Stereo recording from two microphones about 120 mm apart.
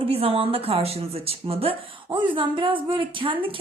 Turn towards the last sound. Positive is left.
turn(degrees=-45)  # may be behind; listen again after turning